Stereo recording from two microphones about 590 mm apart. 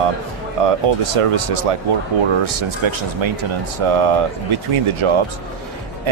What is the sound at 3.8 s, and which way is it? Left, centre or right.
Speech, right.